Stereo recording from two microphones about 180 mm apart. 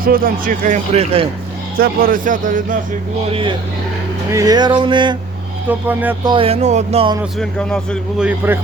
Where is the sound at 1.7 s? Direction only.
55° right (ahead or behind).